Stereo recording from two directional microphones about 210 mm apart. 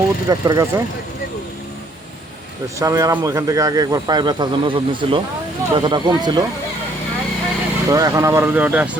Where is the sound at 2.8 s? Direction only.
15° right (ahead or behind).